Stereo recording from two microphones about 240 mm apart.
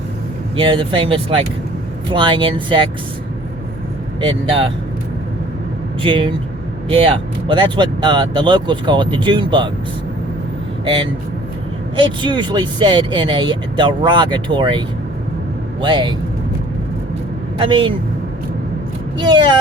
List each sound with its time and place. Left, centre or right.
0.5 s speech: right
4.2 s speech: right
6.0 s speech: right
10.8 s speech: centre
17.6 s speech: centre
19.2 s speech: centre